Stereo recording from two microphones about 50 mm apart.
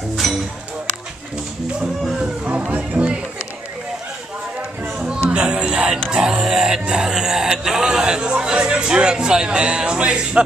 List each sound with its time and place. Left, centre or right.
0.1 s music: centre
2.7 s music: right
4.8 s music: centre